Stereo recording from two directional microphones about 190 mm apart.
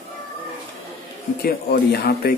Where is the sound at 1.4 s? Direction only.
55° left (ahead or behind).